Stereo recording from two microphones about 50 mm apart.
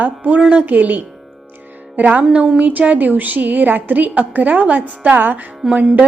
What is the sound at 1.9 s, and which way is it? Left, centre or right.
Music, right.